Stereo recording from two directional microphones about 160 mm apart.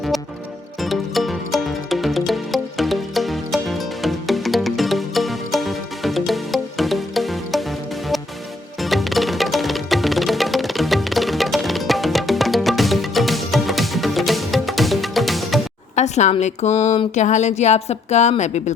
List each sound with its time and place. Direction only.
0.8 s music: centre (ahead or behind)
8.8 s music: centre (ahead or behind)
16.0 s a woman's voice: 45° left (ahead or behind)